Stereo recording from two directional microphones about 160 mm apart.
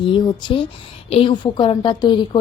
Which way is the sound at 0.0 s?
30° left (ahead or behind).